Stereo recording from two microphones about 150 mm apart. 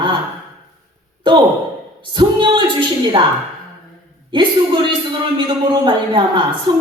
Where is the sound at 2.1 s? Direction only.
30° right (ahead or behind).